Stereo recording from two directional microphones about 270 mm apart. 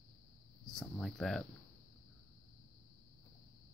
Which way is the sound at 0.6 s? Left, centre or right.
Centre.